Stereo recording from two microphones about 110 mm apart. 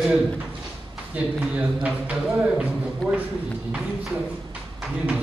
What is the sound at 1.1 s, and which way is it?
A man's voice, 10° right (ahead or behind).